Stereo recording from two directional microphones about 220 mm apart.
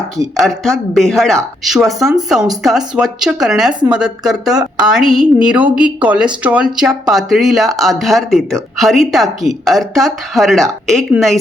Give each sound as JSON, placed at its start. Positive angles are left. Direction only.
{"t": 0.3, "sound": "a woman's voice", "side_deg": 0}